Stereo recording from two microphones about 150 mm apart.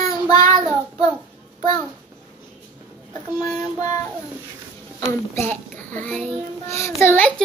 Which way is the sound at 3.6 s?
25° left (ahead or behind).